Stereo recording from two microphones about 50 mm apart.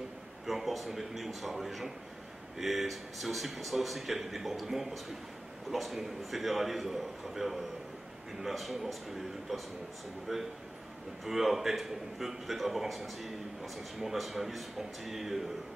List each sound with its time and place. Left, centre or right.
0.5 s a man's voice: centre
10.3 s a man's voice: centre